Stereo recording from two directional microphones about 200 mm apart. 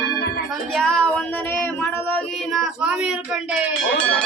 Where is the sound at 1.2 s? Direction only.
10° left (ahead or behind).